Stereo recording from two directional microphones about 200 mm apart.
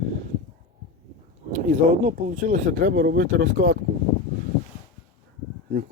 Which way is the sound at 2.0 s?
40° right (ahead or behind).